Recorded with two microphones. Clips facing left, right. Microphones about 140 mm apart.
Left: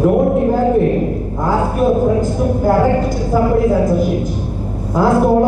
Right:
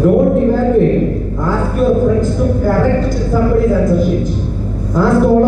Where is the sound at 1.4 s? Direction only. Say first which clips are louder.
Even; 35° left (ahead or behind).